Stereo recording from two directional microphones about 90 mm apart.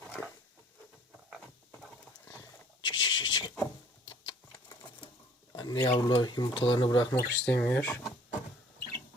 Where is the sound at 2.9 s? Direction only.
60° left (ahead or behind).